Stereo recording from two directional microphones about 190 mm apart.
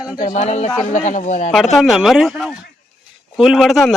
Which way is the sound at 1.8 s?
Centre (ahead or behind).